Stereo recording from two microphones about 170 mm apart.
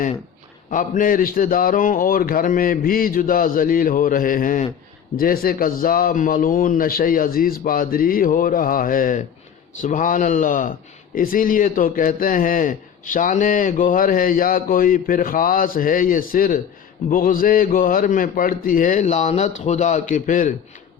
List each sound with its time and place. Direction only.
0.7 s a man's voice: 50° left (ahead or behind)